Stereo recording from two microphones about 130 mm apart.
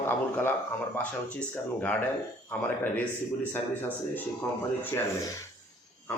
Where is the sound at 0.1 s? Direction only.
15° left (ahead or behind).